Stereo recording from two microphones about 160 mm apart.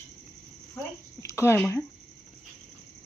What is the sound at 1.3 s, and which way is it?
Speech, 15° left (ahead or behind).